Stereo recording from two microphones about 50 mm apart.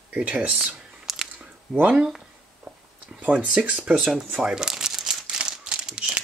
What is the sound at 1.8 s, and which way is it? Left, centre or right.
Speech, right.